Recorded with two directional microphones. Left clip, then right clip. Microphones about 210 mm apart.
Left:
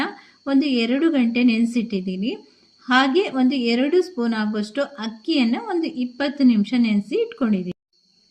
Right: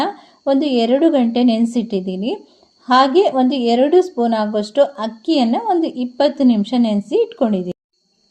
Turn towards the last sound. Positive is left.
turn(degrees=-5)  # may be behind; listen again after turning